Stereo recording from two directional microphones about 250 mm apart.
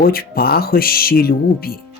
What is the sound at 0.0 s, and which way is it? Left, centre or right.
Speech, left.